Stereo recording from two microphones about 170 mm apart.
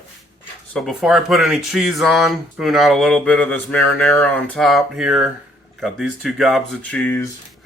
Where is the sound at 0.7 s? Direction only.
Centre (ahead or behind).